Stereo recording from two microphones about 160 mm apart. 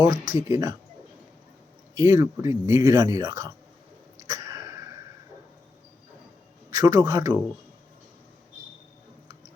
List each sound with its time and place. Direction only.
0.0 s speech: 20° right (ahead or behind)
2.0 s speech: 15° right (ahead or behind)
4.3 s a sound: 20° right (ahead or behind)
6.7 s speech: 20° right (ahead or behind)